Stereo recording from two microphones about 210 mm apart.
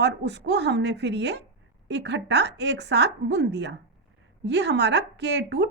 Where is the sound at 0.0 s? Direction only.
55° right (ahead or behind).